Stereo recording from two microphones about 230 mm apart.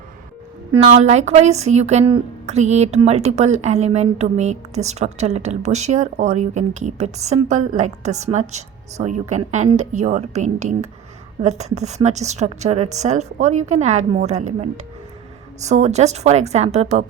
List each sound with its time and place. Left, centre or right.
0.8 s a woman's voice: right